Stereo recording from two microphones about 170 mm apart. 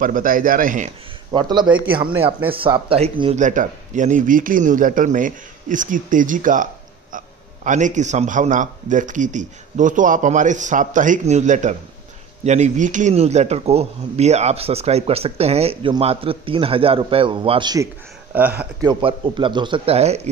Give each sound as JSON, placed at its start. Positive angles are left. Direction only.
{"t": 0.0, "sound": "speech", "side_deg": -55}
{"t": 1.3, "sound": "speech", "side_deg": -25}
{"t": 18.3, "sound": "speech", "side_deg": -10}
{"t": 18.9, "sound": "speech", "side_deg": -30}